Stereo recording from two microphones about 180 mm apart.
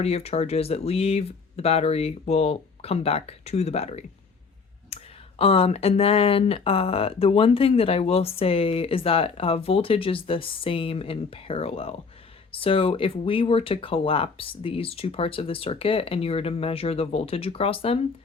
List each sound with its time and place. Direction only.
0.0 s speech: 35° left (ahead or behind)
4.9 s clicking: 35° left (ahead or behind)
5.4 s speech: 35° left (ahead or behind)